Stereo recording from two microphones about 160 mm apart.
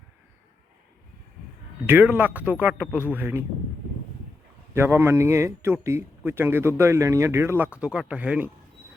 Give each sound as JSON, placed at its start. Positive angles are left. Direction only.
{"t": 1.9, "sound": "a man's voice", "side_deg": -10}
{"t": 4.7, "sound": "a man's voice", "side_deg": -15}